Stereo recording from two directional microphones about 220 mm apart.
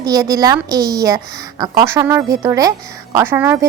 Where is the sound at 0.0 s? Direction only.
15° right (ahead or behind).